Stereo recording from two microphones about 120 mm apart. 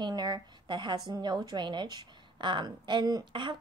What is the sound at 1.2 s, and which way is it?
Speech, 35° right (ahead or behind).